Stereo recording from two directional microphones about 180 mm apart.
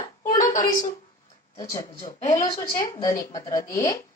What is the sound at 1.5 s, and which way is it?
A woman's voice, 20° left (ahead or behind).